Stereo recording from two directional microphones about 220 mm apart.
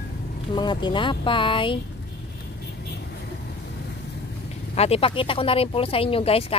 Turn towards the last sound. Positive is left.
turn(degrees=25)  # may be behind; listen again after turning